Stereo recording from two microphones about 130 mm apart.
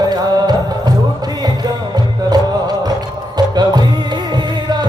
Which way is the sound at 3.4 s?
30° right (ahead or behind).